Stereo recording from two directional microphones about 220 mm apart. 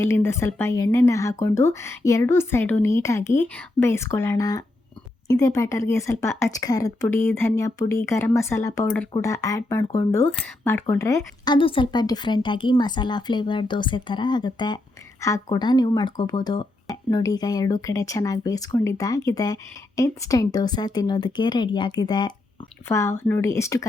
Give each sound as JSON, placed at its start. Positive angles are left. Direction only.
{"t": 0.0, "sound": "speech", "side_deg": 10}